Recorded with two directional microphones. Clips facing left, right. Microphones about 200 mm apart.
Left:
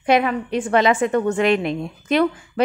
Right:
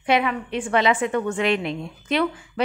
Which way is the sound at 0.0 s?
45° left (ahead or behind).